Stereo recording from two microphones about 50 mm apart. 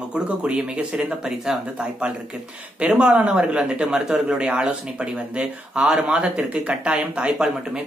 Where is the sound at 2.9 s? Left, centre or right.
Centre.